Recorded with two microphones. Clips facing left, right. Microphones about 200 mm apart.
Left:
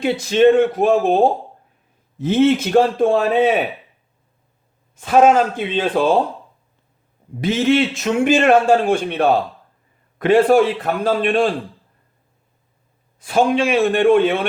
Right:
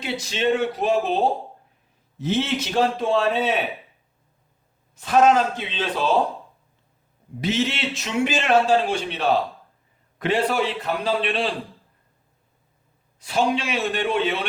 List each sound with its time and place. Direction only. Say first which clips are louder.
0.0 s a man's voice: left 11 dB; 50° left (ahead or behind)
4.9 s a man's voice: left 4 dB; 50° left (ahead or behind)
7.4 s a man's voice: left 8 dB; 50° left (ahead or behind)
13.1 s a man's voice: left 6 dB; 50° left (ahead or behind)